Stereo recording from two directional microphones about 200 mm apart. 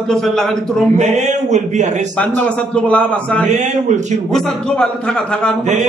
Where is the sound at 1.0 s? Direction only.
35° right (ahead or behind).